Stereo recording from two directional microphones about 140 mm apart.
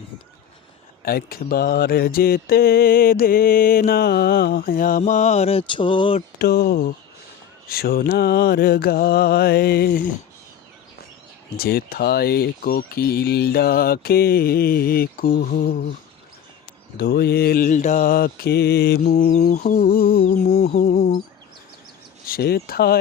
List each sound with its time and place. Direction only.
1.0 s mantra: 90° left; by 6.2 s 40° left (ahead or behind)
6.4 s mantra: 90° left
11.5 s mantra: 90° left
17.0 s mantra: 90° left
19.0 s mantra: 65° left (ahead or behind); by 19.5 s 80° left
19.6 s mantra: 90° left
22.3 s mantra: 90° left